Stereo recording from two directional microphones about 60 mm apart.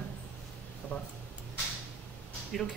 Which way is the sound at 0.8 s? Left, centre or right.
Left.